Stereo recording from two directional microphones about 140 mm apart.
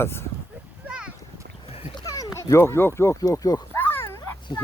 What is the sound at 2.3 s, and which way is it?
Speech, 20° left (ahead or behind).